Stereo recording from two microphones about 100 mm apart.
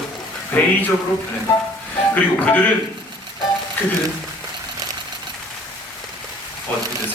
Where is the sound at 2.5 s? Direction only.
20° left (ahead or behind).